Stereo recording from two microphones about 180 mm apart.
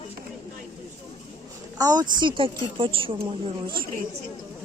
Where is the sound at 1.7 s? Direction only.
20° right (ahead or behind).